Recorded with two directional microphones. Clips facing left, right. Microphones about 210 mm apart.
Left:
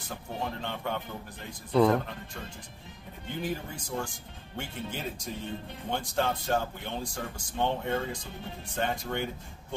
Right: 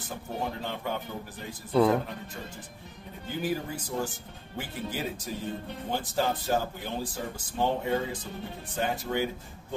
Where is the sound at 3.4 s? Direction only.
5° right (ahead or behind).